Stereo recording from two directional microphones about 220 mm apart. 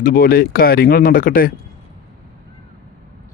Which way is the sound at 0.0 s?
40° left (ahead or behind).